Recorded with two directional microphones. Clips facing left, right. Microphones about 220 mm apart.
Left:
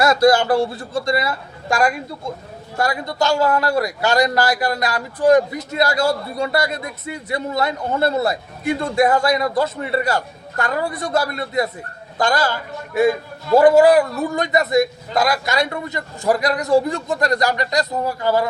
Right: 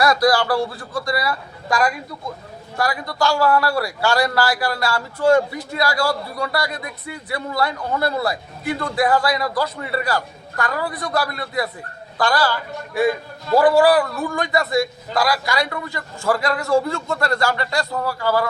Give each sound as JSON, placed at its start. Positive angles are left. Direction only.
{"t": 0.0, "sound": "a man's voice", "side_deg": 25}